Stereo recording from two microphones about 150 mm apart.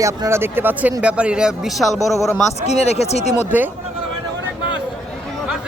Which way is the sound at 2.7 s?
45° left (ahead or behind).